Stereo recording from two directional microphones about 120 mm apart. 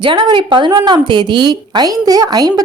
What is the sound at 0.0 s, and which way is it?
A woman's voice, 40° right (ahead or behind).